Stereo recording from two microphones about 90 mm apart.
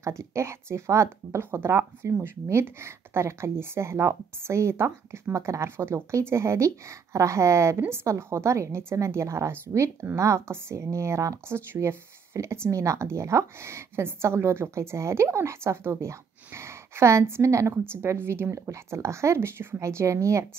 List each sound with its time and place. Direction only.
0.0 s a woman's voice: 35° right (ahead or behind)